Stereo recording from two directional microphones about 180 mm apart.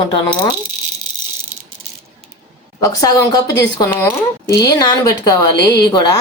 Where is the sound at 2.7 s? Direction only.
20° left (ahead or behind).